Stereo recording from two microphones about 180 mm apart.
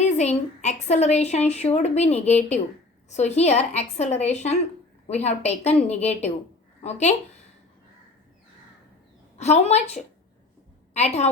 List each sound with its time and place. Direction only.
0.0 s speech: 40° left (ahead or behind)
9.4 s speech: 40° left (ahead or behind)